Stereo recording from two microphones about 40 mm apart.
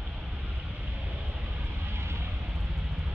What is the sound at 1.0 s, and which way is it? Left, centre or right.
Vehicle, right.